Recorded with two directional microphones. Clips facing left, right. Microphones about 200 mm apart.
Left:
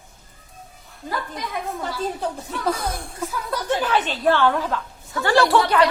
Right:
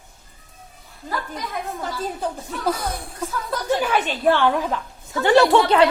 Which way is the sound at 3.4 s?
Centre (ahead or behind).